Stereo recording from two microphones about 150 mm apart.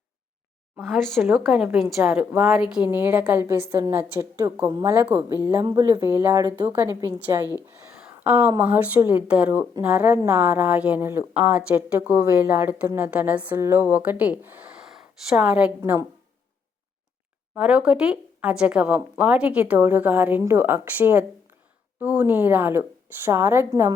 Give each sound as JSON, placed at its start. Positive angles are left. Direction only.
{"t": 0.8, "sound": "a woman's voice", "side_deg": 0}
{"t": 15.8, "sound": "a woman's voice", "side_deg": -20}
{"t": 17.5, "sound": "a woman's voice", "side_deg": -10}